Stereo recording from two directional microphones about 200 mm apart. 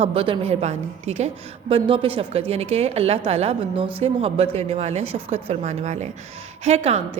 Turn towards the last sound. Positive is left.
turn(degrees=-30)  # may be behind; listen again after turning